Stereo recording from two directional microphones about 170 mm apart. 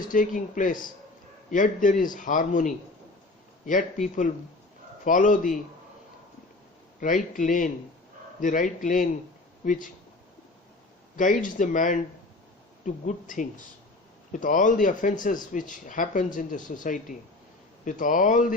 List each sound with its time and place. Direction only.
0.0 s a man's voice: 50° left (ahead or behind)
5.0 s a man's voice: 50° left (ahead or behind)
7.0 s a man's voice: 50° left (ahead or behind)
11.2 s a man's voice: 50° left (ahead or behind)